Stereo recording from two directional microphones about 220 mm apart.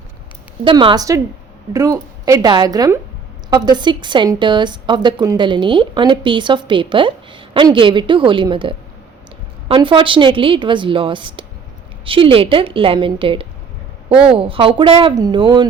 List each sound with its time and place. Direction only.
0.6 s a woman's voice: 20° right (ahead or behind)